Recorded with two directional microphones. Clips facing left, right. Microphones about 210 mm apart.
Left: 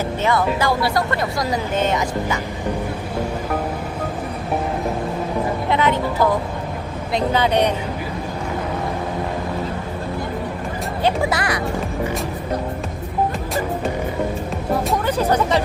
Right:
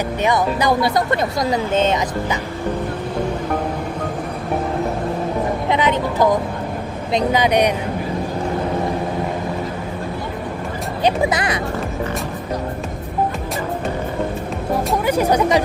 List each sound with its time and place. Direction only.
0.2 s speech: 15° right (ahead or behind)
5.7 s speech: 20° right (ahead or behind)
11.0 s speech: 20° right (ahead or behind)
15.0 s speech: 10° right (ahead or behind)